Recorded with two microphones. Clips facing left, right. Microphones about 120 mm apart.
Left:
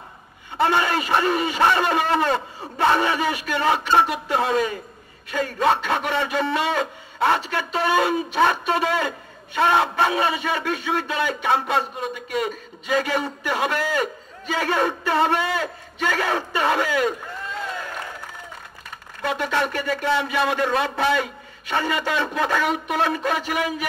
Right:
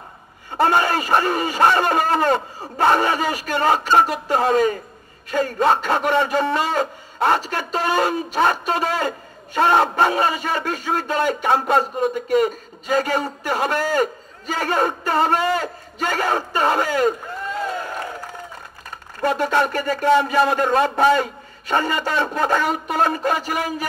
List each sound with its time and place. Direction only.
0.5 s a man's voice: 45° right (ahead or behind)
17.6 s a sound: 40° right (ahead or behind)
18.9 s a man's voice: 40° right (ahead or behind)